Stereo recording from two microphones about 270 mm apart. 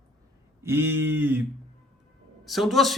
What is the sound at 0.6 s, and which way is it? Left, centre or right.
Speech, centre.